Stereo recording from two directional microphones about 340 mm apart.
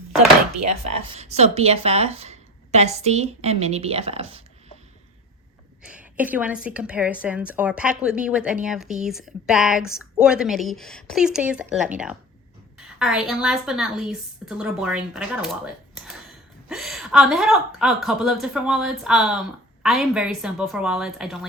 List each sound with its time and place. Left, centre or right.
0.7 s speech: centre
5.8 s a woman's voice: centre